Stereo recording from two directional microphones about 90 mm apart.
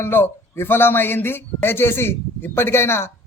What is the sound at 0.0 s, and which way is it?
Speech, 25° left (ahead or behind).